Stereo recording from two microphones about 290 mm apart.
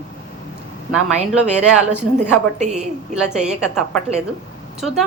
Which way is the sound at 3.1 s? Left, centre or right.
Centre.